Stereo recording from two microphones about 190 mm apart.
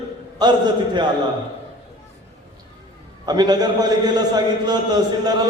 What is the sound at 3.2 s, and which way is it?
A man's voice, 20° right (ahead or behind).